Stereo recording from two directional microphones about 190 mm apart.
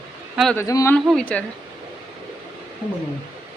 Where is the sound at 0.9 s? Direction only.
5° left (ahead or behind).